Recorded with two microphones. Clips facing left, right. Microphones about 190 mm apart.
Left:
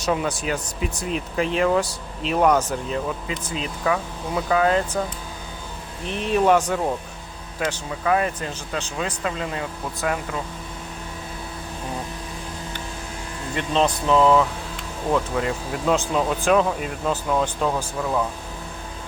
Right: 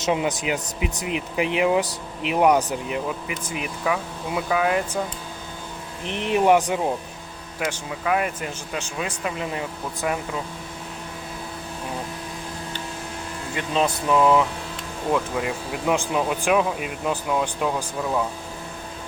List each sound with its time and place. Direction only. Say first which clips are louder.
0.0 s speech: right 1 dB; 20° right (ahead or behind)
6.1 s speech: even; 15° right (ahead or behind)
13.6 s speech: left 2 dB; 5° right (ahead or behind)